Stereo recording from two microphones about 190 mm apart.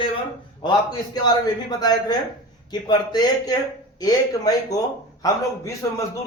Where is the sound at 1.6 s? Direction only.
20° left (ahead or behind).